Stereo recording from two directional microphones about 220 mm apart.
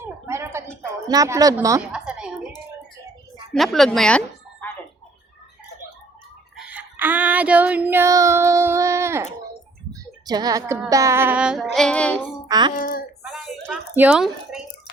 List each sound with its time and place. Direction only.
0.0 s a sound: 10° right (ahead or behind)
1.0 s a woman's voice: 15° right (ahead or behind)
1.9 s a sound: 5° right (ahead or behind)
3.5 s a woman's voice: centre (ahead or behind)
6.6 s child singing: 5° right (ahead or behind)
11.7 s a woman's voice: 5° left (ahead or behind)
12.5 s speech: 20° right (ahead or behind)
12.7 s a child's voice: 40° left (ahead or behind)
13.7 s a sound: 5° right (ahead or behind)